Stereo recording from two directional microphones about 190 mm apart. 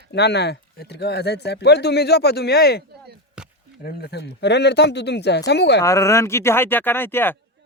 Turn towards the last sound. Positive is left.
turn(degrees=10)  # may be behind; listen again after turning